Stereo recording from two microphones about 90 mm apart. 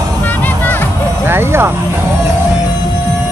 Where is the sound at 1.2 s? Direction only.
25° right (ahead or behind).